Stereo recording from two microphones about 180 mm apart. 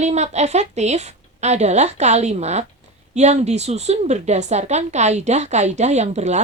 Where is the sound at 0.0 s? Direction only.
40° right (ahead or behind).